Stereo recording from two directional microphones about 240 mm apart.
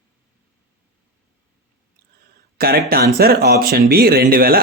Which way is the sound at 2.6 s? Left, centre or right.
Right.